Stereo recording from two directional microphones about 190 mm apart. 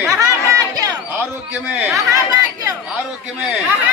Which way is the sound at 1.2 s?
10° right (ahead or behind).